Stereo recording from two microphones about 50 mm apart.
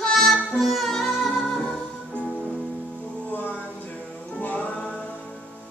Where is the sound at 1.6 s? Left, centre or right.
Centre.